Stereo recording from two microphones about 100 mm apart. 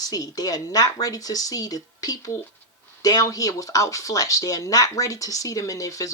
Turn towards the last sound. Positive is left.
turn(degrees=35)  # may be behind; listen again after turning